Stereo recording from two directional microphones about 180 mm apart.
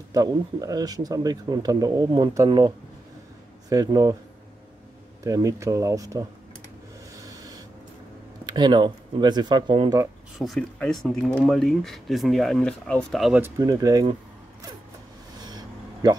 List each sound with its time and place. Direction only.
0.1 s speech: 20° right (ahead or behind)
5.2 s speech: 20° right (ahead or behind)
7.2 s a sound: 20° right (ahead or behind)
8.5 s speech: 25° right (ahead or behind)
10.4 s speech: centre (ahead or behind)
13.4 s speech: 20° right (ahead or behind)
15.3 s a sound: 20° right (ahead or behind)